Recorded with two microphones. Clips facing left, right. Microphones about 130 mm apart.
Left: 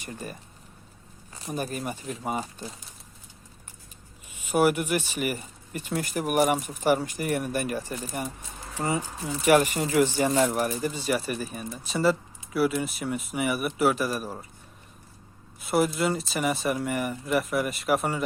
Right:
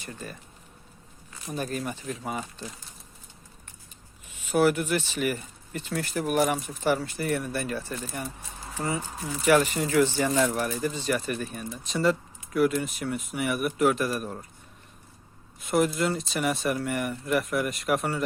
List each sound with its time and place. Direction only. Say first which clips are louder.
0.0 s speech: left 2 dB; 15° left (ahead or behind)
1.5 s speech: even; 10° left (ahead or behind)
4.3 s speech: even; 10° left (ahead or behind)
8.8 s speech: left 2 dB; 30° left (ahead or behind)
9.5 s speech: left 1 dB; 15° left (ahead or behind)
15.6 s speech: even; 5° left (ahead or behind)